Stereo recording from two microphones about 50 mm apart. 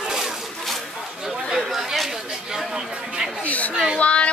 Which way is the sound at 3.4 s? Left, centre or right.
Left.